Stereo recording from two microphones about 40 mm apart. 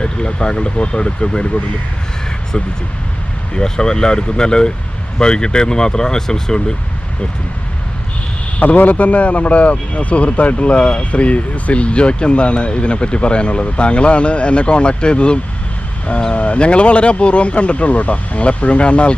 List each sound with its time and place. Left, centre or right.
0.0 s speech: left
3.5 s speech: centre
8.6 s speech: left